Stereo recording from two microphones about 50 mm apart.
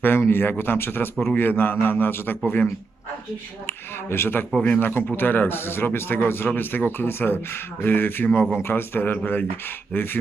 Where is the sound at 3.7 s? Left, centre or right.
Left.